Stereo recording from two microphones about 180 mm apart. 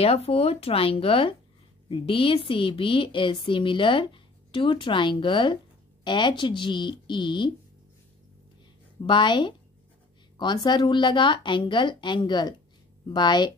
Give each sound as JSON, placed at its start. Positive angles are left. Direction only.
{"t": 0.0, "sound": "a woman's voice", "side_deg": 35}
{"t": 9.0, "sound": "a woman's voice", "side_deg": 25}